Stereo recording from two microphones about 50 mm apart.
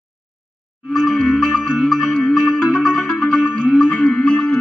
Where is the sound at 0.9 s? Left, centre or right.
Centre.